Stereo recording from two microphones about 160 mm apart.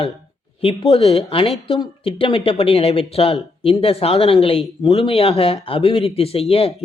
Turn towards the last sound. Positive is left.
turn(degrees=35)  # may be behind; listen again after turning